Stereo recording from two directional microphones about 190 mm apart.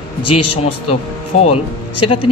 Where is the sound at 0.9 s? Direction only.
35° left (ahead or behind).